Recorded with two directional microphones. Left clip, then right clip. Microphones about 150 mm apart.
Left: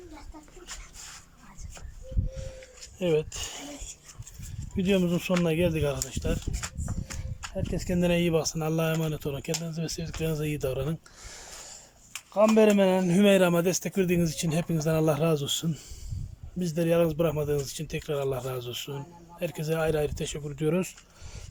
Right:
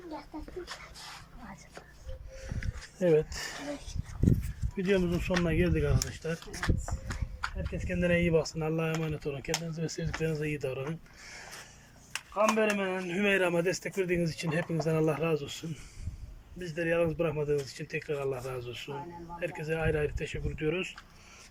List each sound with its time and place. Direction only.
3.0 s speech: 10° left (ahead or behind)
4.8 s speech: 20° left (ahead or behind)
7.5 s speech: 30° left (ahead or behind)
9.6 s speech: 10° left (ahead or behind)
10.2 s speech: 20° left (ahead or behind)
12.3 s speech: 35° left (ahead or behind)